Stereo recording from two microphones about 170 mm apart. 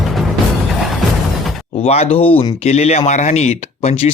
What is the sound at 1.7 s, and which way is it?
Speech, 35° left (ahead or behind).